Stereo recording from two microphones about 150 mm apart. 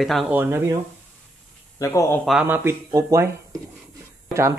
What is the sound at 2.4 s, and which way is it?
Speech, 15° right (ahead or behind).